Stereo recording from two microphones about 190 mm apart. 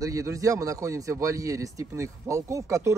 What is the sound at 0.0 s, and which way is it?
A man's voice, 15° right (ahead or behind).